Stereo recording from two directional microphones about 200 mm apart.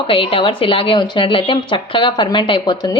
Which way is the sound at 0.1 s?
25° left (ahead or behind).